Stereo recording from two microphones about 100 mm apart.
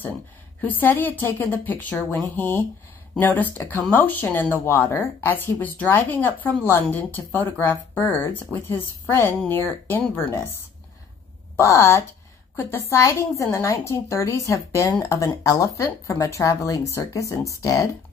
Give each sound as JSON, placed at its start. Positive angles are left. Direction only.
{"t": 0.6, "sound": "a woman's voice", "side_deg": 20}
{"t": 3.3, "sound": "a woman's voice", "side_deg": 15}
{"t": 11.5, "sound": "a woman's voice", "side_deg": 25}